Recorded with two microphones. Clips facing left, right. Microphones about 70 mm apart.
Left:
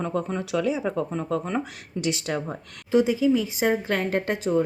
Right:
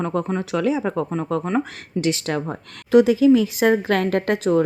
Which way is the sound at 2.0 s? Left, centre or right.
Right.